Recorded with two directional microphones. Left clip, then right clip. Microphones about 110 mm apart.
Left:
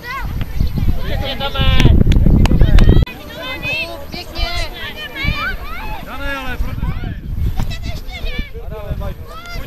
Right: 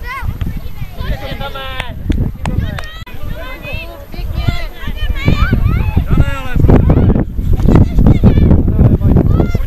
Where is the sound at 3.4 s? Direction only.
25° left (ahead or behind).